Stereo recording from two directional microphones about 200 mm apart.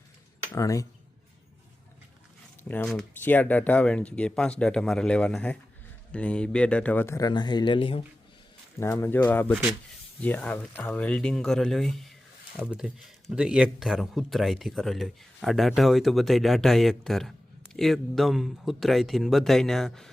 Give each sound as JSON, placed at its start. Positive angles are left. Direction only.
{"t": 0.5, "sound": "speech", "side_deg": 15}
{"t": 2.6, "sound": "speech", "side_deg": 5}
{"t": 8.8, "sound": "speech", "side_deg": 15}